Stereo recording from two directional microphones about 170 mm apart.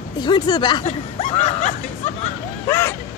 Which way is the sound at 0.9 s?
40° left (ahead or behind).